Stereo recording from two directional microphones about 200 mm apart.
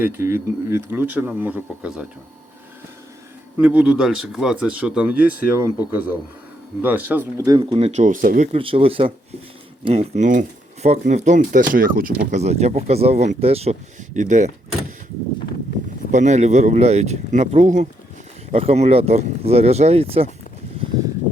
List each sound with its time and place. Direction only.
0.0 s speech: 10° right (ahead or behind)
3.6 s a man's voice: 5° right (ahead or behind)
7.6 s speech: 30° right (ahead or behind)
8.5 s speech: 25° right (ahead or behind); by 12.1 s 45° right (ahead or behind)
12.3 s speech: 35° right (ahead or behind)
16.1 s speech: 35° right (ahead or behind)